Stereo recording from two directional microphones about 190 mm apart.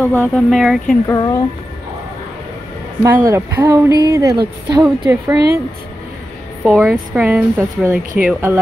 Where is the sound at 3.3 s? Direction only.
15° right (ahead or behind).